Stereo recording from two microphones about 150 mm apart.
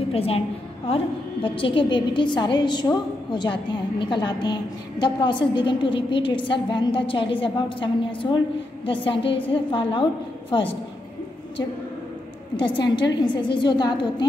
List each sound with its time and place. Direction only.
0.1 s a woman's voice: 40° left (ahead or behind)
12.5 s a woman's voice: 30° left (ahead or behind)